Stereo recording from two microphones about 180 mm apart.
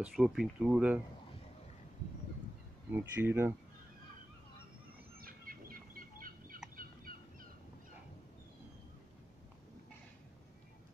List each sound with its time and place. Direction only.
0.0 s speech: 5° right (ahead or behind)
2.9 s speech: 10° right (ahead or behind)
5.2 s bird: 55° right (ahead or behind)
6.8 s turkey: 50° right (ahead or behind)